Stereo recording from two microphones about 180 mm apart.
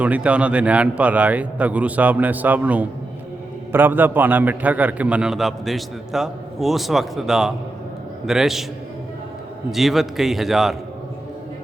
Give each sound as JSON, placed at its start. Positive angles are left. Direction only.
{"t": 0.0, "sound": "a man's voice", "side_deg": -5}
{"t": 9.7, "sound": "a man's voice", "side_deg": 0}